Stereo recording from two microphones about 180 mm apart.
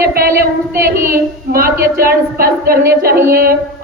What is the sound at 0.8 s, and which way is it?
Speech, 15° right (ahead or behind).